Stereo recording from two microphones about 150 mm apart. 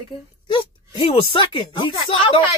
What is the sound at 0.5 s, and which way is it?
Speech, 35° left (ahead or behind).